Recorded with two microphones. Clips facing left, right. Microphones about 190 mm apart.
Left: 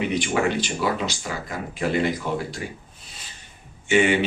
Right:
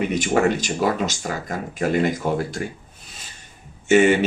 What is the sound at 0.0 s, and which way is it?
Speech, 45° right (ahead or behind).